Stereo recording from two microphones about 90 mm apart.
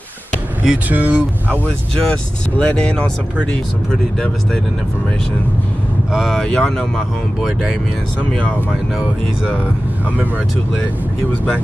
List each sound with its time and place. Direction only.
0.7 s speech: 15° right (ahead or behind)
2.0 s speech: 15° left (ahead or behind)
6.1 s speech: centre (ahead or behind)
8.3 s speech: 10° left (ahead or behind)